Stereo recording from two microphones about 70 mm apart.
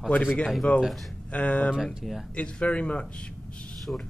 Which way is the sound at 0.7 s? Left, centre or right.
Centre.